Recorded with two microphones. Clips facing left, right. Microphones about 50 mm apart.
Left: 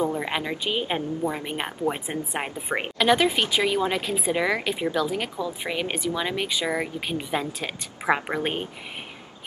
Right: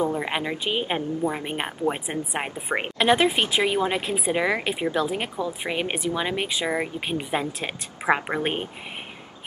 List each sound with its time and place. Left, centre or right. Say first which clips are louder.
0.1 s a woman's voice: right 1 dB; centre
3.0 s a woman's voice: right 1 dB; right
4.9 s speech: right 1 dB; right
8.0 s a woman's voice: right 1 dB; centre